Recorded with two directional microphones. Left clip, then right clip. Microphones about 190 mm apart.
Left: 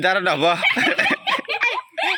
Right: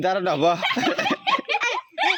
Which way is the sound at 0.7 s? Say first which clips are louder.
Left 4 dB; 15° right (ahead or behind).